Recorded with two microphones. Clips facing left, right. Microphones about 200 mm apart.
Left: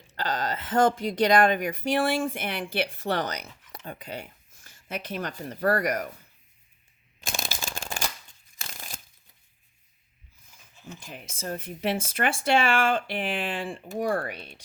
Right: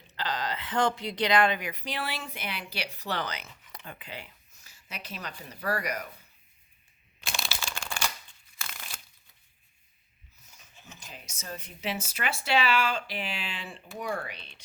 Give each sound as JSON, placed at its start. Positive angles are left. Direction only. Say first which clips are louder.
{"t": 0.2, "sound": "speech", "louder": "left 3 dB", "side_deg": 45}
{"t": 3.7, "sound": "a sound", "louder": "left 6 dB", "side_deg": 35}
{"t": 5.4, "sound": "speech", "louder": "left 7 dB", "side_deg": 50}
{"t": 7.2, "sound": "shuffling cards", "louder": "left 2 dB", "side_deg": 45}
{"t": 7.9, "sound": "a sound", "louder": "left 1 dB", "side_deg": 40}
{"t": 11.1, "sound": "speech", "louder": "left 7 dB", "side_deg": 55}